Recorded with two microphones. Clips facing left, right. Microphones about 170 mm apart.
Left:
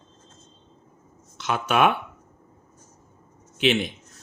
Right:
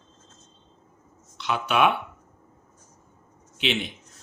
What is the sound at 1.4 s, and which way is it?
Speech, 45° left (ahead or behind).